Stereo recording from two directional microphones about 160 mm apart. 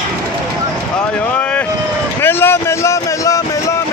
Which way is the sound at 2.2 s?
15° left (ahead or behind).